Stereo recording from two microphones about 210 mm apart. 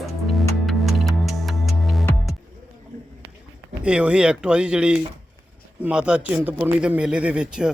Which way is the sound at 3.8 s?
5° right (ahead or behind).